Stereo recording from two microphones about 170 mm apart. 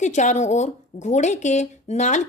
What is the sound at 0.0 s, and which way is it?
Speech, 45° left (ahead or behind).